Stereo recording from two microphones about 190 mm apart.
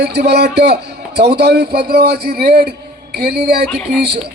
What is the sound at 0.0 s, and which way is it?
A man's voice, 60° right (ahead or behind).